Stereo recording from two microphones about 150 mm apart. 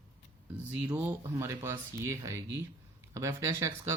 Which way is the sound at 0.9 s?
15° right (ahead or behind).